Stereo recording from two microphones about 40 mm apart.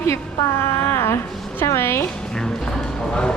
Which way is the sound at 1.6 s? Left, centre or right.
Left.